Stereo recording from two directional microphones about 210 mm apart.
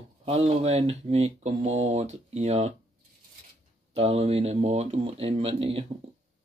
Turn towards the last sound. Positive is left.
turn(degrees=-30)  # may be behind; listen again after turning